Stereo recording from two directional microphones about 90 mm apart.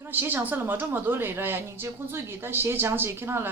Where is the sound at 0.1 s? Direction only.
20° right (ahead or behind).